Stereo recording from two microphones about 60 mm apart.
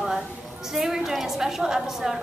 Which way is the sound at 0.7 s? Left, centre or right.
Centre.